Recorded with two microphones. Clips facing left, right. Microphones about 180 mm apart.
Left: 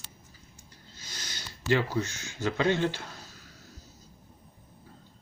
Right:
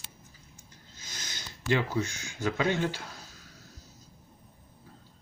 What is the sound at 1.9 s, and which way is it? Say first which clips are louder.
Speech: even; 10° right (ahead or behind).